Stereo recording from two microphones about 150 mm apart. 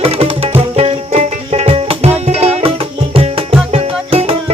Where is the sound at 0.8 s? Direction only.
45° right (ahead or behind).